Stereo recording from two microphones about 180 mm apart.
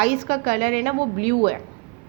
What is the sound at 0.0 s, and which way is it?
A woman's voice, 50° right (ahead or behind).